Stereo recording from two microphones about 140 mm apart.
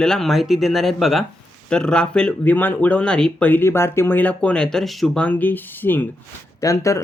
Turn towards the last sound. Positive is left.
turn(degrees=20)  # may be behind; listen again after turning